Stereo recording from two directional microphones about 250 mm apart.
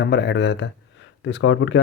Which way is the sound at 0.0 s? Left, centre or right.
Left.